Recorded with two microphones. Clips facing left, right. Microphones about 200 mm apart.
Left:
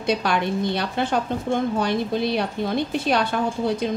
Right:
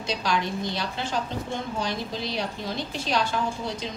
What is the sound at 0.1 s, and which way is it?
A woman's voice, 60° left (ahead or behind).